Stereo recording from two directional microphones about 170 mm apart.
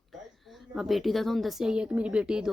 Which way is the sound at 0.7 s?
Centre (ahead or behind).